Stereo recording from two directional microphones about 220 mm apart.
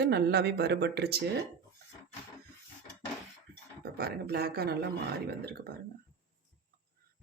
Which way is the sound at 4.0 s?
45° right (ahead or behind).